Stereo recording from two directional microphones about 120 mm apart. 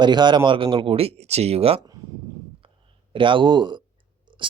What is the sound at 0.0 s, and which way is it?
Speech, 40° right (ahead or behind).